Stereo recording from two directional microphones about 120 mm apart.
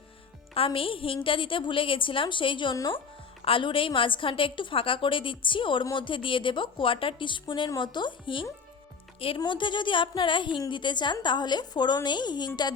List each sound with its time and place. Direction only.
0.5 s a woman's voice: 50° left (ahead or behind)